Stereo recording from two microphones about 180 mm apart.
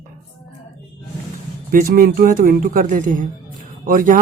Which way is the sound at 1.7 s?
55° right (ahead or behind).